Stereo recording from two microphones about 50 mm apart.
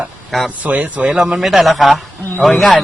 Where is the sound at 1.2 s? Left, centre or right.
Centre.